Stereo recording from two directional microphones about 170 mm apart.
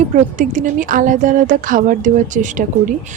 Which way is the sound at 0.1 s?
45° right (ahead or behind).